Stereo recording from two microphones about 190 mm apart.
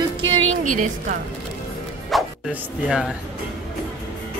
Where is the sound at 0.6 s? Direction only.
40° right (ahead or behind).